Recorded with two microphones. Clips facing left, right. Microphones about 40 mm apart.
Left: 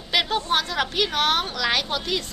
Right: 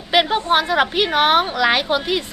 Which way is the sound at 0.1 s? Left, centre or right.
Right.